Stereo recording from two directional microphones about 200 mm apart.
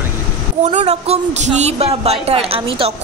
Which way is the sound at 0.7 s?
35° right (ahead or behind).